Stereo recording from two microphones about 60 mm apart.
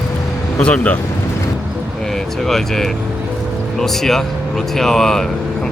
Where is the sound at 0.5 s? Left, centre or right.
Centre.